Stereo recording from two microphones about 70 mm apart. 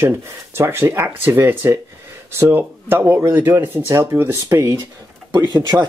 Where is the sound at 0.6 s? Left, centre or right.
Right.